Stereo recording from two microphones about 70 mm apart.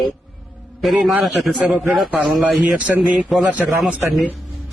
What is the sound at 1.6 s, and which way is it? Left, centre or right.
Speech, centre.